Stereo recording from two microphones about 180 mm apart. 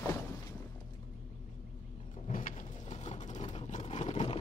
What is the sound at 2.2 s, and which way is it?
Vehicle, 45° left (ahead or behind).